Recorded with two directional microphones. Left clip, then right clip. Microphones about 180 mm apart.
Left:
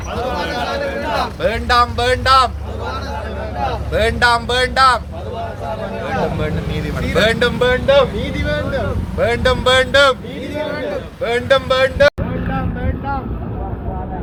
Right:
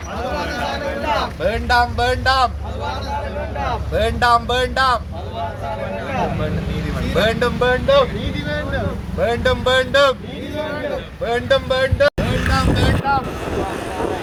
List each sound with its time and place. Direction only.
1.4 s speech: 15° left (ahead or behind)
3.9 s speech: 20° left (ahead or behind)
7.2 s speech: 20° left (ahead or behind)
9.2 s speech: 20° left (ahead or behind)
11.2 s speech: 20° left (ahead or behind)